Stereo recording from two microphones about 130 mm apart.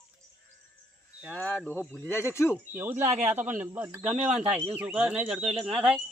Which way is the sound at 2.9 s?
65° right (ahead or behind).